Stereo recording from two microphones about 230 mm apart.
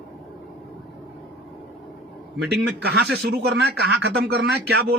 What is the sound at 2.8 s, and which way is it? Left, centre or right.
A man's voice, right.